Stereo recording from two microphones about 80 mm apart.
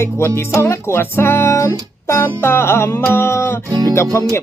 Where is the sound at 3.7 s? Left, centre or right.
Right.